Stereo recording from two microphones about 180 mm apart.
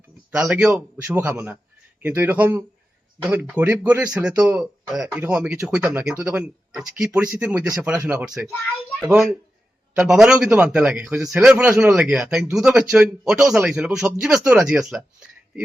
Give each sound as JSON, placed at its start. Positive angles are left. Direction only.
{"t": 0.3, "sound": "a man's voice", "side_deg": -5}
{"t": 14.4, "sound": "speech", "side_deg": -15}